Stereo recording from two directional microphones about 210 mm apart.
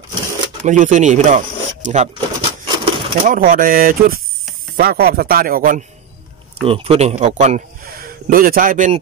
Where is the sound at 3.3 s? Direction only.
40° right (ahead or behind).